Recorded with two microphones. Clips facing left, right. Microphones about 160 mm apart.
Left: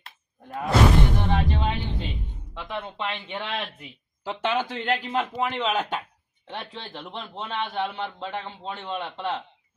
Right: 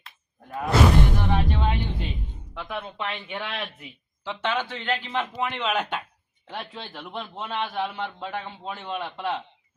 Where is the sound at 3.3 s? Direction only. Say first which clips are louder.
Left 1 dB; 20° left (ahead or behind).